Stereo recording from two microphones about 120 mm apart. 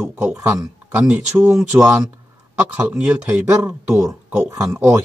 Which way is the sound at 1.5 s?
5° right (ahead or behind).